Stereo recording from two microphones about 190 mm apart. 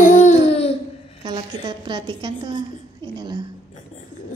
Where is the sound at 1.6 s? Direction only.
25° right (ahead or behind).